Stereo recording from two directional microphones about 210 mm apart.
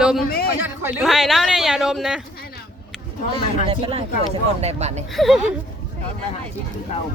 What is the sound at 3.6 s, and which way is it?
Speech, 25° right (ahead or behind).